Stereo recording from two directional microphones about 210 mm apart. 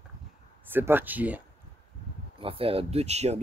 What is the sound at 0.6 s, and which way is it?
Speech, 10° right (ahead or behind).